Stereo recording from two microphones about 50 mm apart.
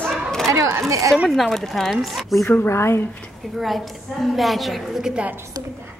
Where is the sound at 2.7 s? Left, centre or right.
Left.